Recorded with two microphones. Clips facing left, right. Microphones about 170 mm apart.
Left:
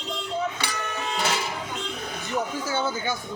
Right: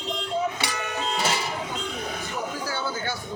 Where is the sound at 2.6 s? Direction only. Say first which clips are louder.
Left 3 dB; 20° left (ahead or behind).